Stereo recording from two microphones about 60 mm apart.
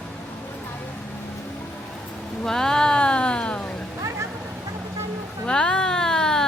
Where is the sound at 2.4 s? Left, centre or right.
Centre.